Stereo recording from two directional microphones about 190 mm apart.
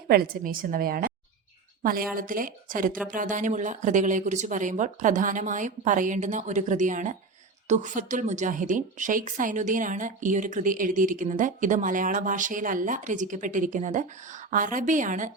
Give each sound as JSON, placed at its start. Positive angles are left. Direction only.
{"t": 0.1, "sound": "a woman's voice", "side_deg": -50}